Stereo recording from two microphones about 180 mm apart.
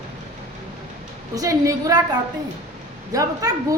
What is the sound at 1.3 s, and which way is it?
A woman's voice, 20° right (ahead or behind).